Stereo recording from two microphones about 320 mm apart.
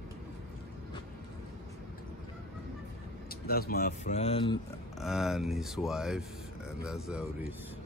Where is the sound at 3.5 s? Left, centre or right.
Left.